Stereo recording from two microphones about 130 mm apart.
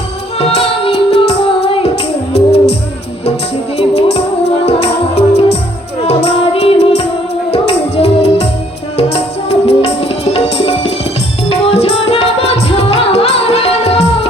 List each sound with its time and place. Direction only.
0.3 s music: 55° left (ahead or behind)
3.8 s music: 55° left (ahead or behind)